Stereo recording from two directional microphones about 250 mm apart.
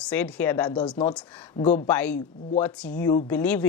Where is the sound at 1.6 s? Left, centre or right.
Left.